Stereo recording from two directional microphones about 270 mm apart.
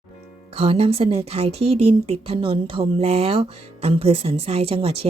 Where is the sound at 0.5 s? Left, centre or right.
Right.